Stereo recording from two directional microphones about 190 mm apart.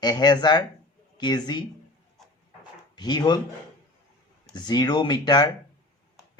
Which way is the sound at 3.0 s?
20° left (ahead or behind).